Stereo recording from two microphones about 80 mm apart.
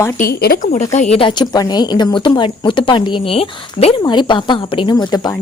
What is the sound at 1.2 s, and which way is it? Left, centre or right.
Speech, left.